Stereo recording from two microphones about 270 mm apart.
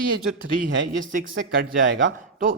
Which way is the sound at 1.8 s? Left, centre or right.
Right.